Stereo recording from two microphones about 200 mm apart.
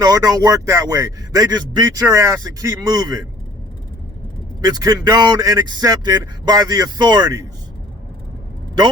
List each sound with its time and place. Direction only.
0.0 s a man's voice: 20° right (ahead or behind)
4.6 s speech: 20° right (ahead or behind)